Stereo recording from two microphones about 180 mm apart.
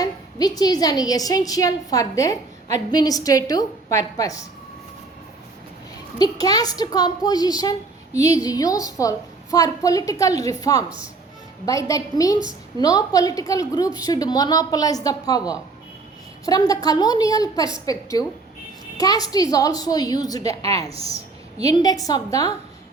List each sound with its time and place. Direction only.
0.0 s a woman's voice: 20° left (ahead or behind)
6.1 s a woman's voice: 20° left (ahead or behind)